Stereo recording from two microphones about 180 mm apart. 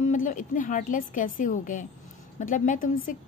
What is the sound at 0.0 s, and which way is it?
A woman's voice, 45° left (ahead or behind).